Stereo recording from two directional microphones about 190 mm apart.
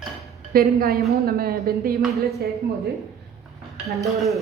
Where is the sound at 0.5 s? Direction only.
55° right (ahead or behind).